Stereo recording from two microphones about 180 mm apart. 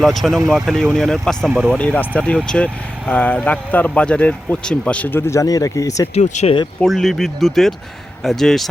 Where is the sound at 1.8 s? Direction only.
10° left (ahead or behind).